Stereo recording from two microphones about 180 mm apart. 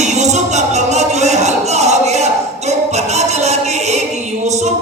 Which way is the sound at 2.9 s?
40° right (ahead or behind).